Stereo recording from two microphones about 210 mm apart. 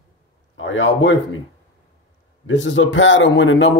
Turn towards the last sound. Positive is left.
turn(degrees=60)  # may be behind; listen again after turning